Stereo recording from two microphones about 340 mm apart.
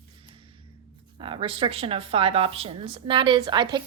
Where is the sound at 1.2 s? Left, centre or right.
Centre.